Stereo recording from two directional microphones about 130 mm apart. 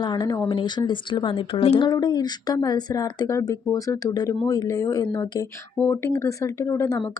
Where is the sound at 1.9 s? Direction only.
30° left (ahead or behind).